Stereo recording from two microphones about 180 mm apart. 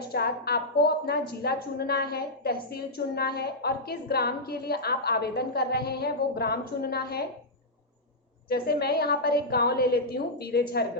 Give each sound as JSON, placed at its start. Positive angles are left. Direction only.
{"t": 0.0, "sound": "a woman's voice", "side_deg": 60}
{"t": 8.4, "sound": "a woman's voice", "side_deg": 60}